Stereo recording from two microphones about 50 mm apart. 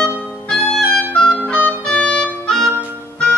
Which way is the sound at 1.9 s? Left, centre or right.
Left.